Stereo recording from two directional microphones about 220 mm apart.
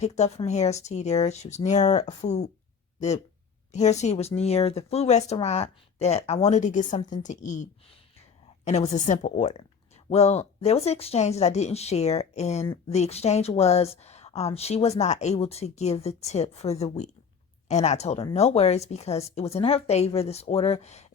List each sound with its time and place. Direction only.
0.0 s speech: 30° left (ahead or behind)
3.7 s speech: 30° left (ahead or behind)